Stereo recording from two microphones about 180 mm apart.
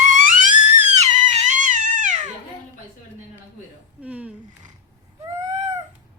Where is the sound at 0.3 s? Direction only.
40° right (ahead or behind).